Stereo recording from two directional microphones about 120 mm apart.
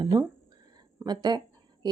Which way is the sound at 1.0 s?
35° right (ahead or behind).